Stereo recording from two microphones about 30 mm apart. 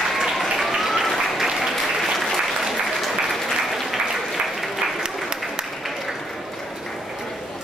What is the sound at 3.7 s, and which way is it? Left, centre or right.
Applause, centre.